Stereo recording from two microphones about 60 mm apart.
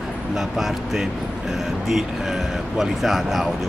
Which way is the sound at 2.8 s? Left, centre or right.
Centre.